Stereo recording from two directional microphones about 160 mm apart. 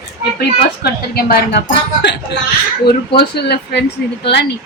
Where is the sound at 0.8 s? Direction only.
75° left (ahead or behind).